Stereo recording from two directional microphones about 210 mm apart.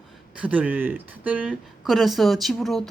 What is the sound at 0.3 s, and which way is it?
Speech, 5° right (ahead or behind).